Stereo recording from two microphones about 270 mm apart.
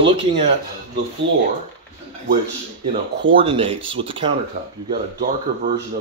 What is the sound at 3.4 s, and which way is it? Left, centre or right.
Speech, centre.